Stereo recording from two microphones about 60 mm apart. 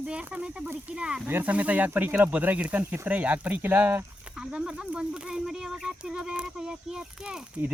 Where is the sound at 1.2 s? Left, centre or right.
Right.